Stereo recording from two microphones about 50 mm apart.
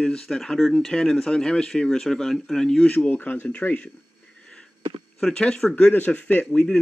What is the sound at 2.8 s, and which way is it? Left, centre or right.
Speech, left.